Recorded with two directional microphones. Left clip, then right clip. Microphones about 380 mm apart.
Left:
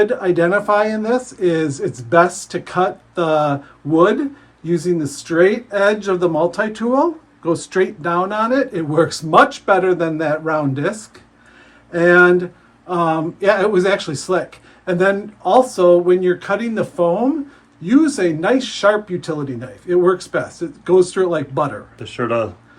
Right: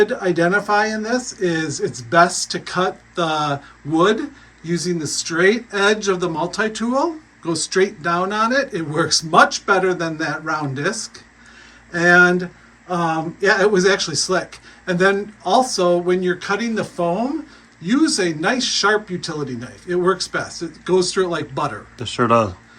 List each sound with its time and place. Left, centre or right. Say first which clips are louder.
0.0 s speech: left 2 dB; centre
22.1 s speech: right 3 dB; centre